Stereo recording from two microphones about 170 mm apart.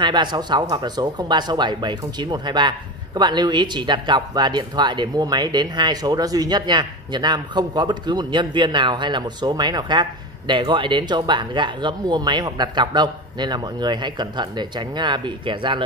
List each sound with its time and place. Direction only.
0.0 s speech: 25° right (ahead or behind)